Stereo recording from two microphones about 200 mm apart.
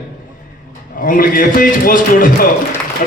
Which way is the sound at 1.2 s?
45° left (ahead or behind).